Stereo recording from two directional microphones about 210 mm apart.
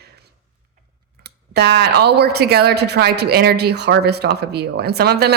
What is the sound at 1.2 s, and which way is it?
Speech, 50° right (ahead or behind).